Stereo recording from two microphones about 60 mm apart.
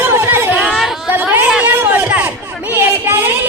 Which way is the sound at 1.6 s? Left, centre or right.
Right.